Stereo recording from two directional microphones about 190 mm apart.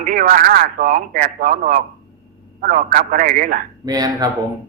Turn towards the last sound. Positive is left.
turn(degrees=-20)  # may be behind; listen again after turning